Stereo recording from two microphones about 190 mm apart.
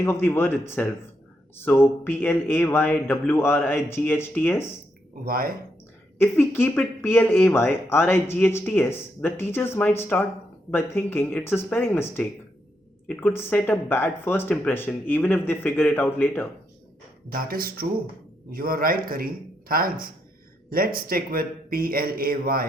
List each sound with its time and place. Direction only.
0.0 s speech: 10° left (ahead or behind)
5.2 s a man's voice: 50° right (ahead or behind)
6.1 s speech: 10° left (ahead or behind)
17.3 s a man's voice: 50° right (ahead or behind)